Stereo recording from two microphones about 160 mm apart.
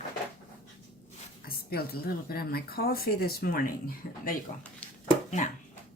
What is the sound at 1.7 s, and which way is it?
Speech, 70° left (ahead or behind).